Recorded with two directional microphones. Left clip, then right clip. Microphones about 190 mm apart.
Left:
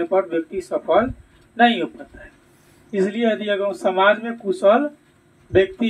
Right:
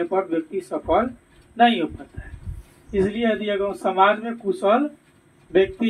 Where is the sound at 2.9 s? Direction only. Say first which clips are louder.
Left 1 dB; 40° left (ahead or behind).